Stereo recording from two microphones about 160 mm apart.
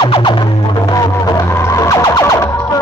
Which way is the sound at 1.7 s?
20° left (ahead or behind).